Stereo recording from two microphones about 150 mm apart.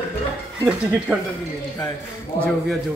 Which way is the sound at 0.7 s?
5° right (ahead or behind).